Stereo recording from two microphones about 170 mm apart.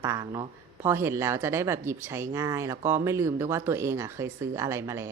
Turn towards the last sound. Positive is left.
turn(degrees=-15)  # may be behind; listen again after turning